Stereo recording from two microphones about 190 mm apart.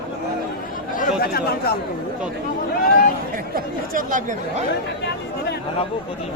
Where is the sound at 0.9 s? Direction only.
50° left (ahead or behind).